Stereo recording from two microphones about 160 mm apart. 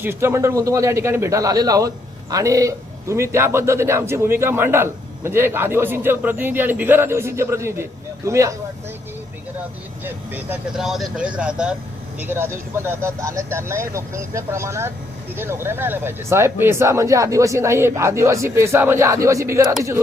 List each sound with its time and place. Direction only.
0.0 s a man's voice: 15° right (ahead or behind)
10.0 s a man's voice: 10° right (ahead or behind)